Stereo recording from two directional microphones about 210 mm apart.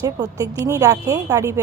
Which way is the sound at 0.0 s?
15° right (ahead or behind).